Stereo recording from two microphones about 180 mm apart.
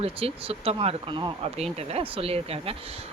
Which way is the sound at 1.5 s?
35° right (ahead or behind).